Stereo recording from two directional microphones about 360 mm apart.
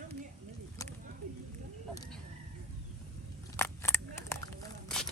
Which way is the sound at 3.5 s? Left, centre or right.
Centre.